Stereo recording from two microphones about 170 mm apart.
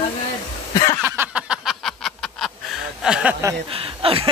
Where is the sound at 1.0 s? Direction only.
15° right (ahead or behind).